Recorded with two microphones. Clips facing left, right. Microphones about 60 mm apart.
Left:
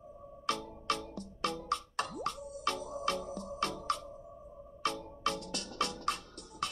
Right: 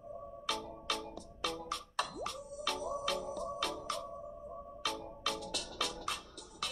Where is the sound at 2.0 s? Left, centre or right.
Left.